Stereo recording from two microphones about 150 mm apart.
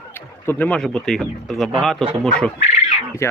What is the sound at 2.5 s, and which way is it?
Bird, 60° left (ahead or behind).